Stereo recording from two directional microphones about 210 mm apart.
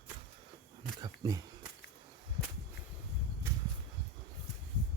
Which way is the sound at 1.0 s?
15° right (ahead or behind).